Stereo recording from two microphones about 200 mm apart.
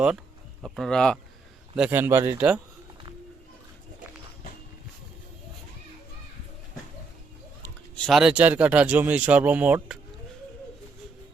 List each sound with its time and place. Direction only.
0.6 s speech: centre (ahead or behind)
7.6 s speech: 5° left (ahead or behind)